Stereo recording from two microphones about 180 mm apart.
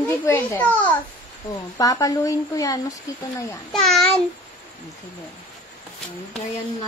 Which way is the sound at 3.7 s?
Centre (ahead or behind).